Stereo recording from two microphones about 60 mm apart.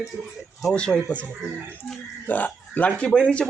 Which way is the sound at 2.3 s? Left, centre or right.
Left.